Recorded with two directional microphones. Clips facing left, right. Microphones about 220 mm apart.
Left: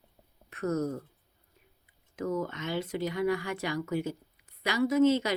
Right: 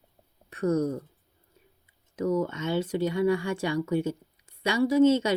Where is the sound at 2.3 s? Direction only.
30° right (ahead or behind).